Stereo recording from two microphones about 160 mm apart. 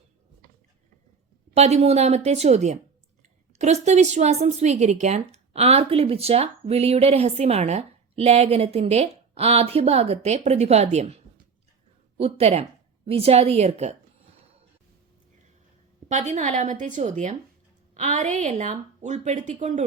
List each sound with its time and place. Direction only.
1.5 s speech: 40° right (ahead or behind)
12.2 s speech: 40° right (ahead or behind)
16.0 s speech: 45° right (ahead or behind)